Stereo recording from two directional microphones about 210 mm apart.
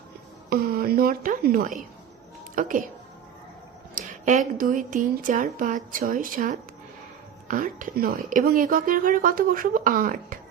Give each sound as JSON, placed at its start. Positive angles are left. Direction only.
{"t": 0.5, "sound": "a woman's voice", "side_deg": -45}
{"t": 3.9, "sound": "a woman's voice", "side_deg": -40}